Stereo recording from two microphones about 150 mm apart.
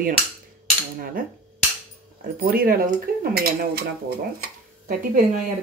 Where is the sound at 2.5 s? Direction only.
75° right (ahead or behind); by 4.1 s 90° right.